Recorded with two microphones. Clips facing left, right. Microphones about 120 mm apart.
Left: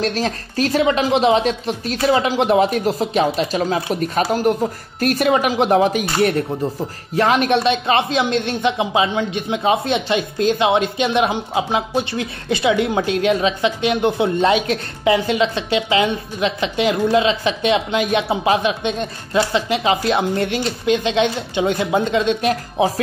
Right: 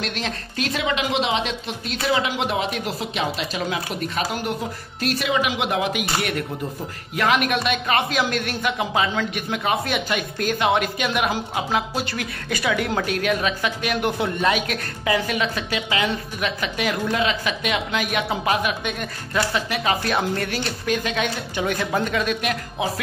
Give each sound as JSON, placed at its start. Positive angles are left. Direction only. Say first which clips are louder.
{"t": 0.0, "sound": "speech", "louder": "left 7 dB", "side_deg": 40}